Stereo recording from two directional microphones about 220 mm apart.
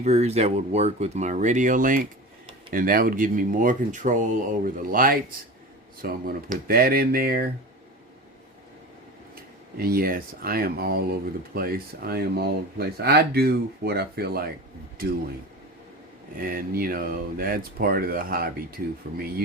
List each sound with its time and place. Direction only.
0.0 s speech: 30° right (ahead or behind)
9.3 s speech: 45° right (ahead or behind)
16.4 s speech: 40° right (ahead or behind)